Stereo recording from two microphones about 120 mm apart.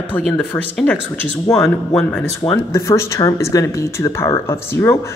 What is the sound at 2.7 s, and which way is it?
Speech, 25° left (ahead or behind).